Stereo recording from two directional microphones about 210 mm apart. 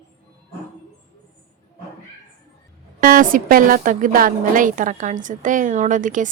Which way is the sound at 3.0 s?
40° right (ahead or behind).